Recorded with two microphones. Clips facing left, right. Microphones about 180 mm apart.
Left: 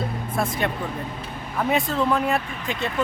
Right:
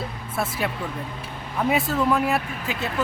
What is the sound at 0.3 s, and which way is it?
Speech, 5° right (ahead or behind).